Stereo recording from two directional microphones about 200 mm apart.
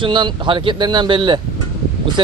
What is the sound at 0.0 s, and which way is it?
Speech, 25° right (ahead or behind).